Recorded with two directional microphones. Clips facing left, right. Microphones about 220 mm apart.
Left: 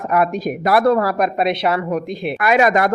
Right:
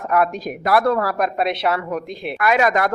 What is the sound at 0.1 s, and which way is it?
Speech, 15° left (ahead or behind).